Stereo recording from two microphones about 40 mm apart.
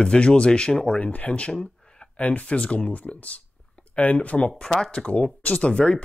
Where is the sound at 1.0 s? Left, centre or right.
Left.